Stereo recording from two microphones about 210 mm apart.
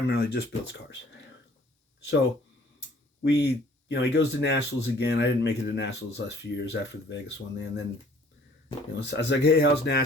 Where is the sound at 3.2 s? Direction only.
55° left (ahead or behind).